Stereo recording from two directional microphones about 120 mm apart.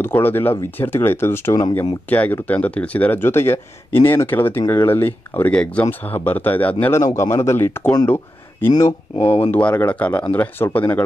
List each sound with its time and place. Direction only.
0.0 s speech: 15° left (ahead or behind)
8.8 s speech: 55° left (ahead or behind)
9.5 s speech: 10° left (ahead or behind)